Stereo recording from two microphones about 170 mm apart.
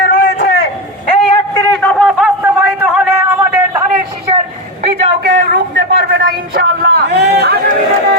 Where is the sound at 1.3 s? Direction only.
15° left (ahead or behind).